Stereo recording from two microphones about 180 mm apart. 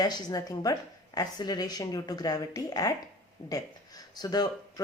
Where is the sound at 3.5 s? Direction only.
20° left (ahead or behind).